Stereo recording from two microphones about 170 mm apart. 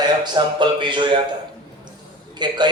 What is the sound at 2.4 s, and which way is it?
Speech, 25° right (ahead or behind).